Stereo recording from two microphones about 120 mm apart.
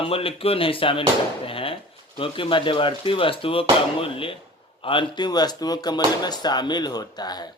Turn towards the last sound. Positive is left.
turn(degrees=35)  # may be behind; listen again after turning